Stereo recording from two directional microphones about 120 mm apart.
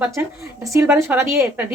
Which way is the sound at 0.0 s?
20° right (ahead or behind).